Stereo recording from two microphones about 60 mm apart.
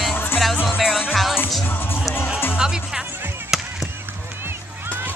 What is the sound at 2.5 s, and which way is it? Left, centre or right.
Music, centre.